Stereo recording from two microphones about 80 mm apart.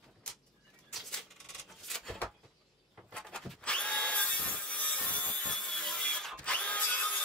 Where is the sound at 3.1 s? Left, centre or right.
Centre.